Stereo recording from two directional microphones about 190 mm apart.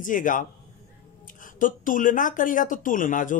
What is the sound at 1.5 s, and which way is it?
Speech, 45° left (ahead or behind).